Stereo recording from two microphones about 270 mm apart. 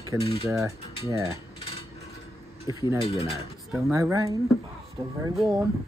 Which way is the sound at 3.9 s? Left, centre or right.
Centre.